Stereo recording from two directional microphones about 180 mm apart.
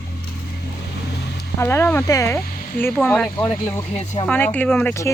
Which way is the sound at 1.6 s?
15° left (ahead or behind).